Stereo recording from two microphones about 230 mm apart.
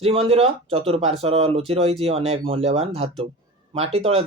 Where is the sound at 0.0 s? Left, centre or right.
Right.